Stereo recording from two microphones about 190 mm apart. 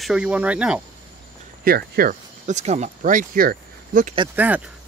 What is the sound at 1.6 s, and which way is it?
Speech, 50° right (ahead or behind).